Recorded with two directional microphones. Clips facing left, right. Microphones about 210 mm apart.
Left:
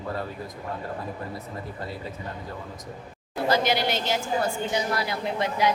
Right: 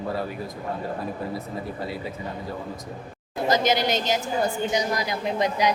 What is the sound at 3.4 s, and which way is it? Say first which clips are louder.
A woman's voice: right 2 dB; 20° right (ahead or behind).